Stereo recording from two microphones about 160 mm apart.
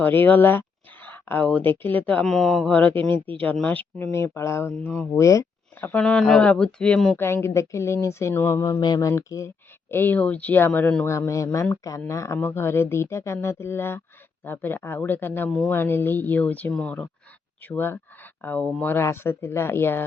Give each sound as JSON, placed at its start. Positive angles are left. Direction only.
{"t": 0.0, "sound": "speech", "side_deg": 10}
{"t": 5.9, "sound": "speech", "side_deg": 5}
{"t": 7.2, "sound": "speech", "side_deg": 15}